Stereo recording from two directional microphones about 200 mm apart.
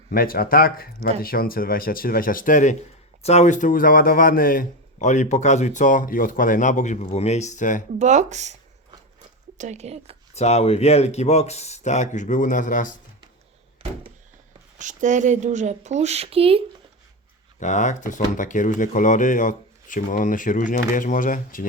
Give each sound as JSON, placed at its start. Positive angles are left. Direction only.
{"t": 0.1, "sound": "speech", "side_deg": 45}
{"t": 7.9, "sound": "speech", "side_deg": -35}
{"t": 9.6, "sound": "speech", "side_deg": -35}
{"t": 10.3, "sound": "speech", "side_deg": 35}
{"t": 13.8, "sound": "a sound", "side_deg": -30}
{"t": 14.8, "sound": "speech", "side_deg": -40}
{"t": 17.6, "sound": "speech", "side_deg": 35}